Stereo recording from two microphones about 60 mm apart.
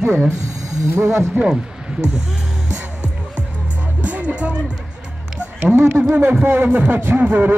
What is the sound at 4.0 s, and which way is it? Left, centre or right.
Music, right.